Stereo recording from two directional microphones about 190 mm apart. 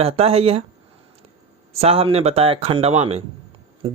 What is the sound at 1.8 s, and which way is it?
Speech, 30° right (ahead or behind).